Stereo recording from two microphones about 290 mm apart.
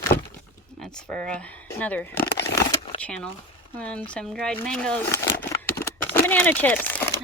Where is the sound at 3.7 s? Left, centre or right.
Centre.